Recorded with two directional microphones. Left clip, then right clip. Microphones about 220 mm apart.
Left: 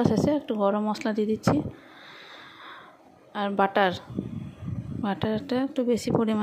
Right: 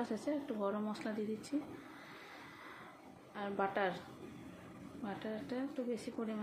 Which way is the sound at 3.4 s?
40° left (ahead or behind).